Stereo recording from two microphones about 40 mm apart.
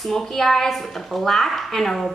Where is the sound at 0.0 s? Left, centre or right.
Centre.